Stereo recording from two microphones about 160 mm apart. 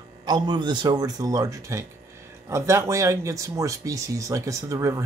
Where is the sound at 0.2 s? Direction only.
25° right (ahead or behind).